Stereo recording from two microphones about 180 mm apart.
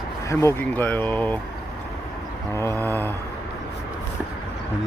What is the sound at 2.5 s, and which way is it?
Speech, 15° left (ahead or behind).